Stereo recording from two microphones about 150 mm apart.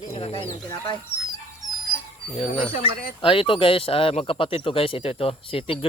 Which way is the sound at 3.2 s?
35° left (ahead or behind).